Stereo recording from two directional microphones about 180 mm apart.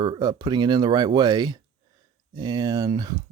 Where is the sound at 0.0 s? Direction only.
25° right (ahead or behind).